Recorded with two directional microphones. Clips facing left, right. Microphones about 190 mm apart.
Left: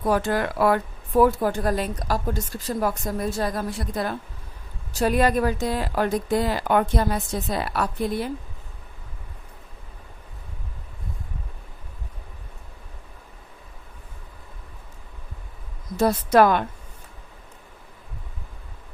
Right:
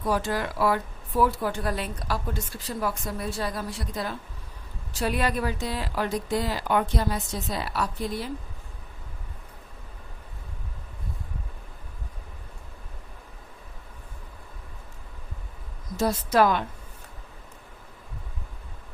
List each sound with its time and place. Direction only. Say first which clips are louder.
0.0 s speech: left 4 dB; 55° left (ahead or behind)
16.0 s a woman's voice: left 4 dB; 55° left (ahead or behind)